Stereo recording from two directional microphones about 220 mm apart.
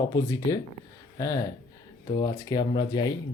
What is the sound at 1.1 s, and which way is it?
Speech, 15° left (ahead or behind).